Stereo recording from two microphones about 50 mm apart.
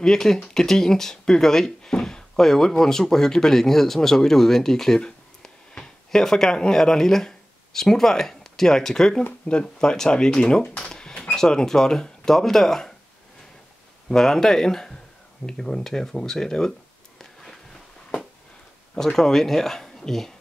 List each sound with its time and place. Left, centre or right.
0.0 s speech: centre
14.0 s speech: centre
18.9 s speech: centre